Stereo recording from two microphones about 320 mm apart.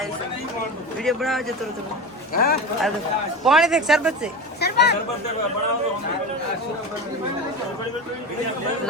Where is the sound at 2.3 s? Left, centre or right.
Left.